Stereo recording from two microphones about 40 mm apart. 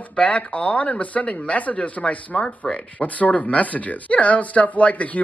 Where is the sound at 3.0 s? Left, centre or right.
Left.